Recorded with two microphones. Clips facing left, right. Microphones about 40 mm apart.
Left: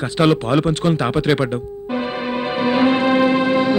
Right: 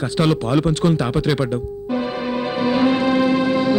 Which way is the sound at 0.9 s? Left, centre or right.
Left.